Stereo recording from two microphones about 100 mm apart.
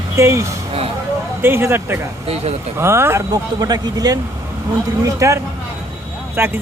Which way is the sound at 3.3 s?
40° right (ahead or behind).